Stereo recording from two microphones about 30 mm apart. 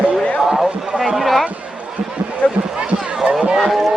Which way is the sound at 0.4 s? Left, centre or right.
Centre.